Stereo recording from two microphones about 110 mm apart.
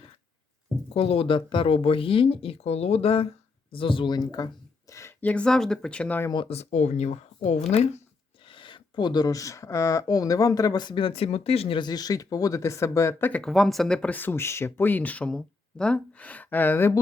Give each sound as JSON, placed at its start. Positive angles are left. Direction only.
{"t": 0.9, "sound": "speech", "side_deg": 55}
{"t": 3.7, "sound": "speech", "side_deg": 55}
{"t": 5.2, "sound": "speech", "side_deg": 10}
{"t": 6.5, "sound": "speech", "side_deg": 85}
{"t": 7.7, "sound": "speech", "side_deg": 75}
{"t": 8.4, "sound": "speech", "side_deg": 50}
{"t": 11.8, "sound": "speech", "side_deg": 35}
{"t": 13.4, "sound": "speech", "side_deg": 0}